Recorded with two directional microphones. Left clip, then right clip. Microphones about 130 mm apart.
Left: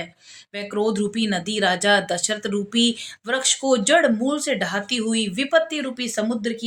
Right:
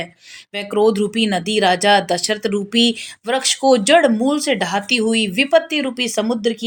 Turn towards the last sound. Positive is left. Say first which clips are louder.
# right 6 dB
turn(degrees=-25)  # may be behind; listen again after turning